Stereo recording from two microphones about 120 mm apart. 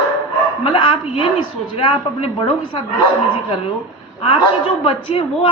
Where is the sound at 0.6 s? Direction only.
45° left (ahead or behind).